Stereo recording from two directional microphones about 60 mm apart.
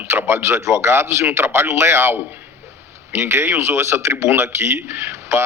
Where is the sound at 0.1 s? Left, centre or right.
Right.